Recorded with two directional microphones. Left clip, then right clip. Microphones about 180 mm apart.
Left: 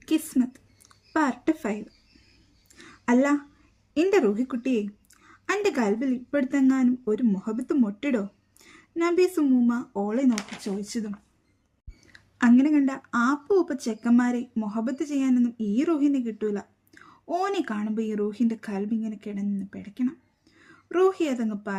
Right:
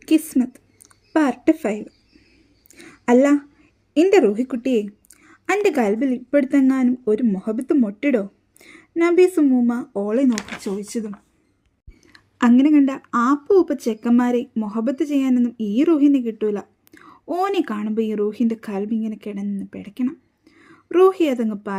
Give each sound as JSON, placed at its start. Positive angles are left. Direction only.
{"t": 0.0, "sound": "a sound", "side_deg": -20}
{"t": 3.9, "sound": "speech", "side_deg": -20}
{"t": 12.1, "sound": "speech", "side_deg": -20}